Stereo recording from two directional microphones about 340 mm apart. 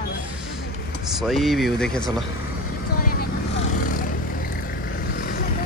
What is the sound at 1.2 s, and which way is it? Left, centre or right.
Speech, centre.